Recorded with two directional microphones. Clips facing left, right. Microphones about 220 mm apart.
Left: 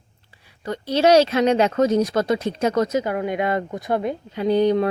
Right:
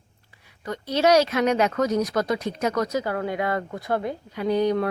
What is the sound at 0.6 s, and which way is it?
A woman's voice, 30° left (ahead or behind).